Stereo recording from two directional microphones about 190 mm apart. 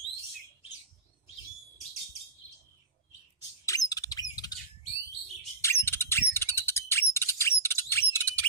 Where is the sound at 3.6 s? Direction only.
20° left (ahead or behind).